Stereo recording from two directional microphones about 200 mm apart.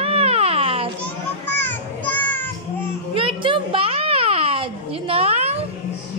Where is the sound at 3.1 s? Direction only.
25° right (ahead or behind).